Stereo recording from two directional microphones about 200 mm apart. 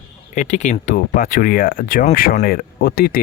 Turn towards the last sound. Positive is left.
turn(degrees=50)  # may be behind; listen again after turning